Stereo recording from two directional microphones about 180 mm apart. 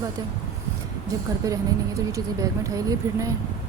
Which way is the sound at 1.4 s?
20° right (ahead or behind).